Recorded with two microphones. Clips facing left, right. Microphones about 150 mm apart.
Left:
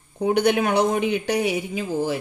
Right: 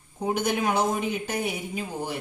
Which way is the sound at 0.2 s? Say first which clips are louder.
Left 6 dB; 70° left (ahead or behind).